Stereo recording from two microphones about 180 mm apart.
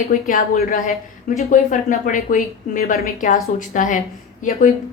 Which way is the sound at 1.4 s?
45° left (ahead or behind).